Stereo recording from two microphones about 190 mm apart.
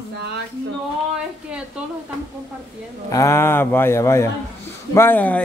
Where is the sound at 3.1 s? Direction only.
15° left (ahead or behind).